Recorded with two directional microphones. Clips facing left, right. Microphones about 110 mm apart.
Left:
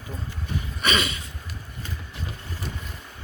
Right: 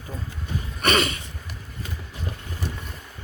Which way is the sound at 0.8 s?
55° right (ahead or behind).